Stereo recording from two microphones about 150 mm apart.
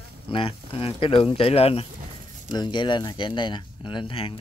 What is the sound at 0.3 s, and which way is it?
Speech, 35° left (ahead or behind).